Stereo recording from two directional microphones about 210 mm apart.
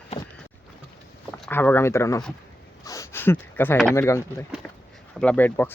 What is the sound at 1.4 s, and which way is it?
Speech, 10° left (ahead or behind).